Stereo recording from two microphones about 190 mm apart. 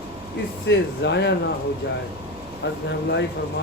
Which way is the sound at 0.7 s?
65° left (ahead or behind).